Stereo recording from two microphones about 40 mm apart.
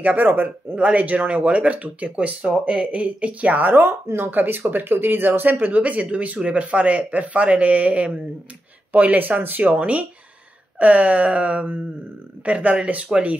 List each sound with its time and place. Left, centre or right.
0.0 s a man's voice: right
0.7 s speech: right
3.6 s speech: right
5.6 s speech: right
12.4 s speech: right